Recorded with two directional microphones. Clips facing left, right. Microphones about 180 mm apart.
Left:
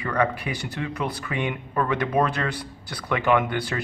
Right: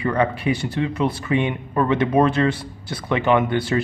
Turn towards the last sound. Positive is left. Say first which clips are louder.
# right 4 dB
turn(degrees=-25)  # may be behind; listen again after turning